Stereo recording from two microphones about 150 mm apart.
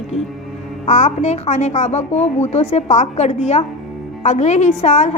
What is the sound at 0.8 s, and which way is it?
Speech, 50° left (ahead or behind).